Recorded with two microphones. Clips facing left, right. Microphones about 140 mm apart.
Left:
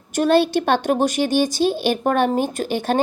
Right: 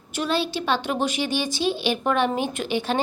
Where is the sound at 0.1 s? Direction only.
50° left (ahead or behind).